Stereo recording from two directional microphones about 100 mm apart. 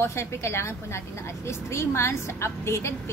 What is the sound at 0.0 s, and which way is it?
A woman's voice, 25° left (ahead or behind).